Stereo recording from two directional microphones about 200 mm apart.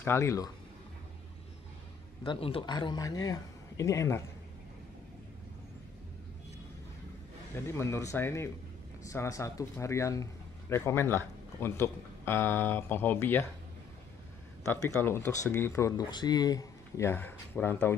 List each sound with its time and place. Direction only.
0.0 s speech: 15° left (ahead or behind)
2.2 s speech: 25° left (ahead or behind)
7.5 s speech: 15° left (ahead or behind)
14.7 s speech: 10° left (ahead or behind)